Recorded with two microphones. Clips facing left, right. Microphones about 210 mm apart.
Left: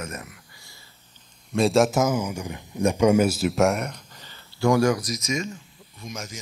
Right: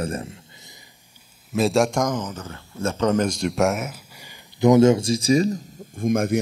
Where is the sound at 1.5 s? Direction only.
Centre (ahead or behind).